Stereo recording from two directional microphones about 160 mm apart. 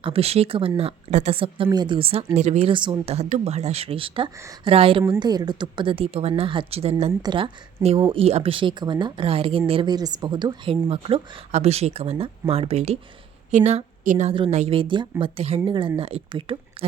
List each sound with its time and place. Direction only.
0.0 s speech: 35° right (ahead or behind)
3.2 s a woman's voice: 45° right (ahead or behind)